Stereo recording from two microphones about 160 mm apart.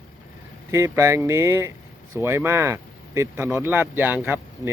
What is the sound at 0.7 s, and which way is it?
Speech, 20° right (ahead or behind).